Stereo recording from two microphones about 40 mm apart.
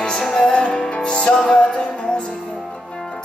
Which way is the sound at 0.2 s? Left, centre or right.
Centre.